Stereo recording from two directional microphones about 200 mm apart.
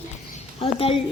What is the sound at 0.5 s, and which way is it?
Speech, 30° left (ahead or behind).